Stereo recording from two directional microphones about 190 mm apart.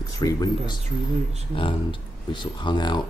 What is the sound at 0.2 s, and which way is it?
Speech, 20° left (ahead or behind).